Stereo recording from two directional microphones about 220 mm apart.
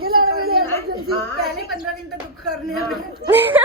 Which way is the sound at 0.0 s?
45° right (ahead or behind).